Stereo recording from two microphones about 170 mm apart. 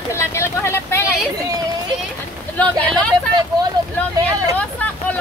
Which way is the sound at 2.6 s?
10° left (ahead or behind).